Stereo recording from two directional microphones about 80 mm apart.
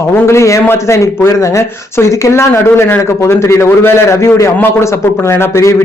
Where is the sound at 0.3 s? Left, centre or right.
Left.